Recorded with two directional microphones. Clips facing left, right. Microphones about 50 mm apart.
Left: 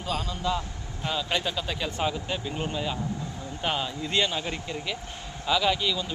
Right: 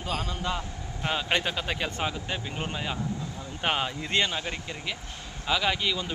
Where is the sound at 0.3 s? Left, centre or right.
Right.